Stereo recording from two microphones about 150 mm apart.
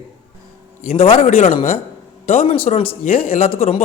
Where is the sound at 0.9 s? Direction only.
40° left (ahead or behind).